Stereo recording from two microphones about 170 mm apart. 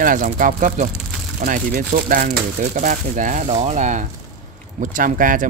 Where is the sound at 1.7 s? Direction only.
60° right (ahead or behind).